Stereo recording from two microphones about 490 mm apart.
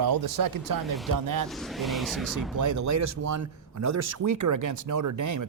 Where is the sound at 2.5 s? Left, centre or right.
Right.